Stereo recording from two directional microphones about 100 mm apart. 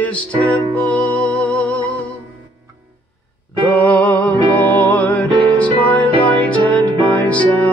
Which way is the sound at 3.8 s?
15° left (ahead or behind).